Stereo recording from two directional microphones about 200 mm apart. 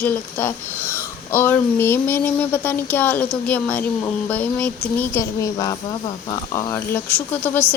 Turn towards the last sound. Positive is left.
turn(degrees=10)  # may be behind; listen again after turning